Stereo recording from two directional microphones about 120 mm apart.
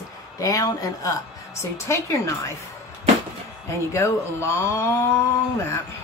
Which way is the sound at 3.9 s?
25° left (ahead or behind).